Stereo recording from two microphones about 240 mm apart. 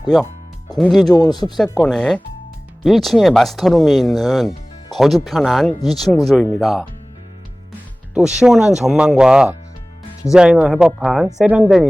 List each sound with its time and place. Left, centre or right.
0.8 s speech: centre
1.1 s speech: centre
1.5 s speech: centre
8.1 s speech: centre